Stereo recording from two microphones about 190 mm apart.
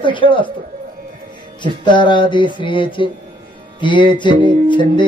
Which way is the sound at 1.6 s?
25° left (ahead or behind).